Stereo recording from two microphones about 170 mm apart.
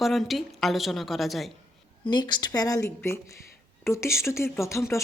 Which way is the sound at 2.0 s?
25° left (ahead or behind).